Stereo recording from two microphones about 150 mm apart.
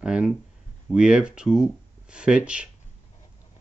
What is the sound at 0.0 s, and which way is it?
Speech, 5° right (ahead or behind).